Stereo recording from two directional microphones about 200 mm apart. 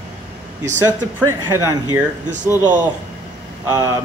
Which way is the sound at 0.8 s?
10° right (ahead or behind).